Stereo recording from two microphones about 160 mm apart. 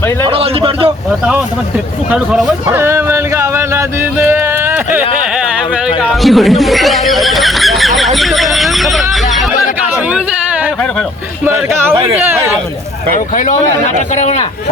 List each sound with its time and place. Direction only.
0.3 s a man's voice: 35° right (ahead or behind)
2.0 s speech: 5° right (ahead or behind)
2.6 s speech: 15° right (ahead or behind); by 9.5 s centre (ahead or behind)
9.9 s a sound: 10° right (ahead or behind)
11.4 s speech: 15° right (ahead or behind)
13.1 s a man's voice: 55° left (ahead or behind)